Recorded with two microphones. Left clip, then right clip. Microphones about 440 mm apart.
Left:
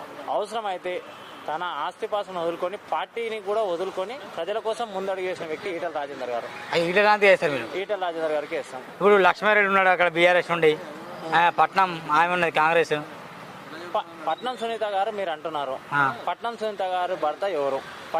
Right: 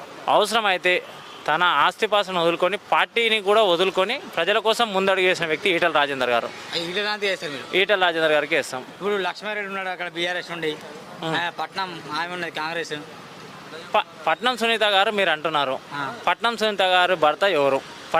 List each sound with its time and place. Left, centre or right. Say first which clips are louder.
0.3 s speech: right 8 dB; right
6.7 s speech: left 7 dB; left
7.8 s speech: right 13 dB; right
9.0 s speech: left 8 dB; left
13.9 s speech: right 6 dB; right